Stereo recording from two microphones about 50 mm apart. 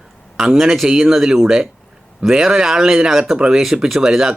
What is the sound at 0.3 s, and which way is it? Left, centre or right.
Speech, centre.